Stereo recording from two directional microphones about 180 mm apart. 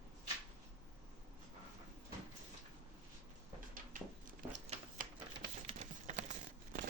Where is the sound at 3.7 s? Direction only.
50° right (ahead or behind).